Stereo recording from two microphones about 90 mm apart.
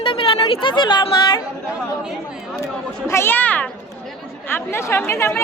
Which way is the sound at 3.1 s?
30° left (ahead or behind).